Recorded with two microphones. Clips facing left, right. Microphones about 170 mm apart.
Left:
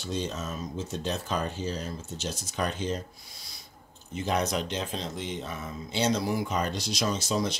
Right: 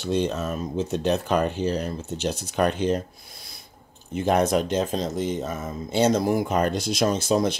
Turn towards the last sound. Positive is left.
turn(degrees=-55)  # may be behind; listen again after turning